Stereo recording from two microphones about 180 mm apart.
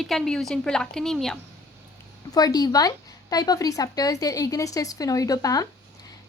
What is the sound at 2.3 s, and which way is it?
A woman's voice, 20° left (ahead or behind).